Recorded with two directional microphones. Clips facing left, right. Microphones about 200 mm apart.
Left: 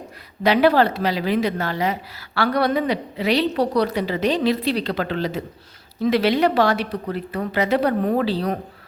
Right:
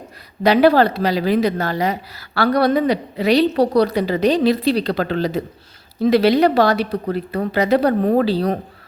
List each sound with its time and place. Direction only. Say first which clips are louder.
0.4 s a woman's voice: right 3 dB; 40° right (ahead or behind)